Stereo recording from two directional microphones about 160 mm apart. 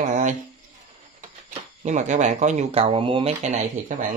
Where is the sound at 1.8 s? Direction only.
50° right (ahead or behind).